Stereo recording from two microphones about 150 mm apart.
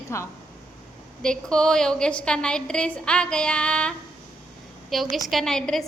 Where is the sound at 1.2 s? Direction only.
5° left (ahead or behind).